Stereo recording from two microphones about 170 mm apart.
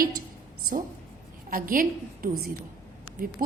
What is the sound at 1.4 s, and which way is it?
A woman's voice, 55° right (ahead or behind).